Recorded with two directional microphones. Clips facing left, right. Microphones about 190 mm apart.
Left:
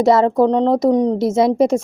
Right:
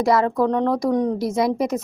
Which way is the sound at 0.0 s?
25° left (ahead or behind).